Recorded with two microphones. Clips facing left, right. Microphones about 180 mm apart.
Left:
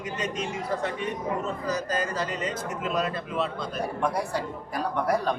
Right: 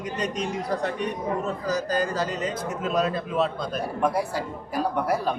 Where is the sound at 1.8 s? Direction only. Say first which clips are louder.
Right 3 dB; 35° right (ahead or behind).